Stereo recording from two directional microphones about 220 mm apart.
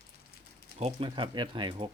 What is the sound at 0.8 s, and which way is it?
Speech, 25° right (ahead or behind).